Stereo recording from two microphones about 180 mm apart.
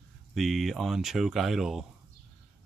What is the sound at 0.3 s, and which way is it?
Speech, centre (ahead or behind).